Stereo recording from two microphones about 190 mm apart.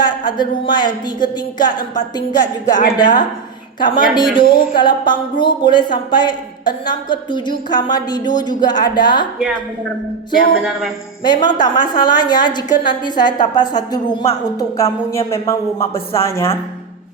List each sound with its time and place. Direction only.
0.0 s speech: 25° left (ahead or behind)
4.4 s music: 50° left (ahead or behind)
4.8 s speech: 25° left (ahead or behind)
10.6 s speech: centre (ahead or behind)
11.2 s speech: 25° left (ahead or behind)